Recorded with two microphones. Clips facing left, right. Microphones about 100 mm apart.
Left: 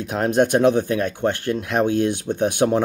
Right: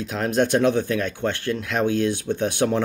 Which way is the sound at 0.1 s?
40° left (ahead or behind).